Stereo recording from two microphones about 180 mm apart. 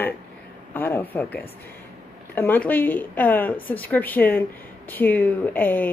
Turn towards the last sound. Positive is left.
turn(degrees=10)  # may be behind; listen again after turning